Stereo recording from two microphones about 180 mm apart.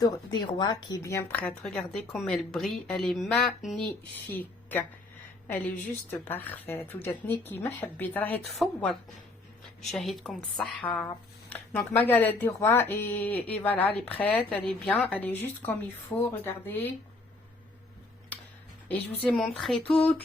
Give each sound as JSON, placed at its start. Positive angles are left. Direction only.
{"t": 0.0, "sound": "a woman's voice", "side_deg": 20}
{"t": 6.1, "sound": "a woman's voice", "side_deg": 10}
{"t": 19.2, "sound": "a woman's voice", "side_deg": 0}
{"t": 19.8, "sound": "speech", "side_deg": 30}